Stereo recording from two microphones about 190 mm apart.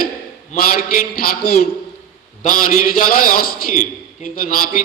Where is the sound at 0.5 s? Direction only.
50° left (ahead or behind).